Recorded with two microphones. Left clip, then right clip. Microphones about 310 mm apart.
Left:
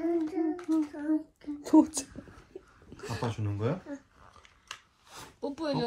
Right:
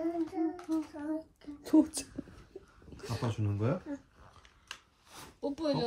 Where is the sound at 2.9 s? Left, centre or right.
Centre.